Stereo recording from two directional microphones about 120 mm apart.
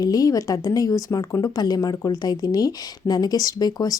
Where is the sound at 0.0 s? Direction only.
30° left (ahead or behind).